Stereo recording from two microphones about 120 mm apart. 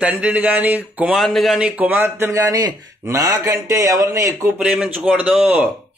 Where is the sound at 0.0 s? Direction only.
10° right (ahead or behind).